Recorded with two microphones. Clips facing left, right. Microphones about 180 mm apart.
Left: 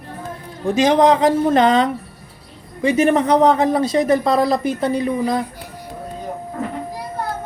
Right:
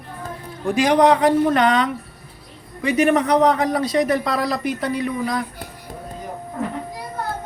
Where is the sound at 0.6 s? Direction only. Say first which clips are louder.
Left 2 dB; 25° left (ahead or behind).